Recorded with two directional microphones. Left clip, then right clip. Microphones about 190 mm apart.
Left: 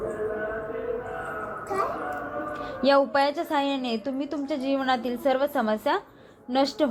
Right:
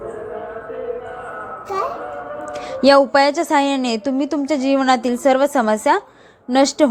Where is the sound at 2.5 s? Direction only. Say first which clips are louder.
Right 9 dB; 30° right (ahead or behind).